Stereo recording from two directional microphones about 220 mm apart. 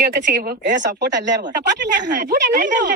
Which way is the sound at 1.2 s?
35° right (ahead or behind).